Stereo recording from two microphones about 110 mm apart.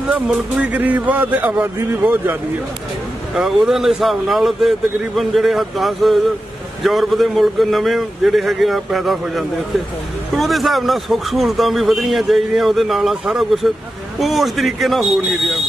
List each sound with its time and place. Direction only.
0.6 s a man's voice: 15° right (ahead or behind)
3.3 s speech: 5° right (ahead or behind)